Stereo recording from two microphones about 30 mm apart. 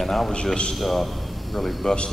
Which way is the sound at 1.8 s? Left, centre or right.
Left.